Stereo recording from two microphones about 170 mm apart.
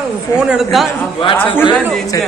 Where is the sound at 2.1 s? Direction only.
20° left (ahead or behind).